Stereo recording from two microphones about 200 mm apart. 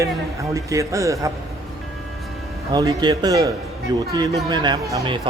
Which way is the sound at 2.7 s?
20° right (ahead or behind).